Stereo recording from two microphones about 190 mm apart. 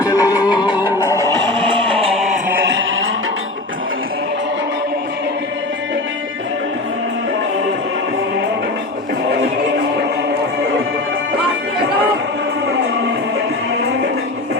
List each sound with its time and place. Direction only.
0.0 s music: 20° left (ahead or behind)
1.5 s a sound: 25° right (ahead or behind)
2.7 s music: 90° right